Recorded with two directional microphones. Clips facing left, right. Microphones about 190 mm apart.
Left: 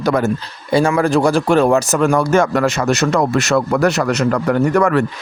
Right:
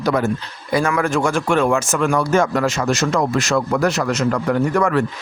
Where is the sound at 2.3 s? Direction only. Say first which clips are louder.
Left 3 dB; 60° left (ahead or behind).